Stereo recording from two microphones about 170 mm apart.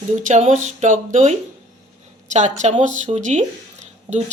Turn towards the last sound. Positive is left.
turn(degrees=-40)  # may be behind; listen again after turning